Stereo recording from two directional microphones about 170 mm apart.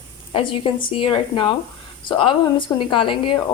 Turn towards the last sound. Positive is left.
turn(degrees=30)  # may be behind; listen again after turning